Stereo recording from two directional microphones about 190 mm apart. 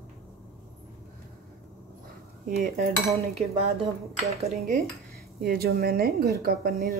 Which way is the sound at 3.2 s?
30° right (ahead or behind).